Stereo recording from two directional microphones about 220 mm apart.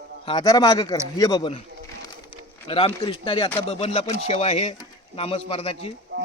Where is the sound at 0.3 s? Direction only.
20° left (ahead or behind).